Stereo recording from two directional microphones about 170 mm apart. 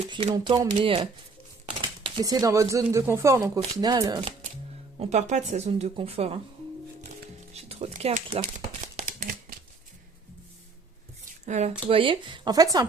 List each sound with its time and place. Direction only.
0.3 s speech: 25° right (ahead or behind)
2.0 s speech: 25° right (ahead or behind)
4.9 s speech: 40° right (ahead or behind)
7.5 s crumpling: 35° right (ahead or behind)
11.4 s speech: 40° right (ahead or behind); by 12.8 s 20° right (ahead or behind)